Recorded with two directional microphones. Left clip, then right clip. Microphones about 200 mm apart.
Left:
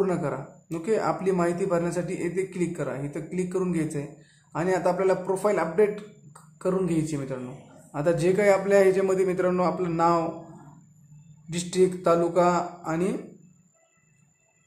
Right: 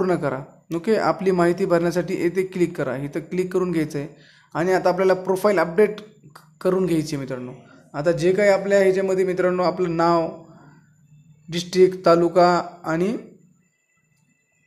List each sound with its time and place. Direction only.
0.0 s speech: 30° right (ahead or behind)
7.9 s a man's voice: 15° right (ahead or behind)
11.5 s speech: 25° right (ahead or behind)